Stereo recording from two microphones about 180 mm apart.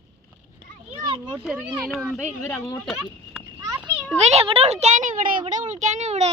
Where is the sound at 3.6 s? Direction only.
10° right (ahead or behind).